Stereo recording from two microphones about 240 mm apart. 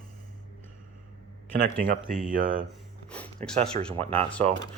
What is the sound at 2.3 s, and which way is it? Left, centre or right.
Speech, right.